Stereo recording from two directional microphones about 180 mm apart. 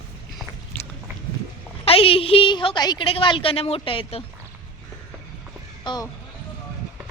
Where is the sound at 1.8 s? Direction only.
30° left (ahead or behind).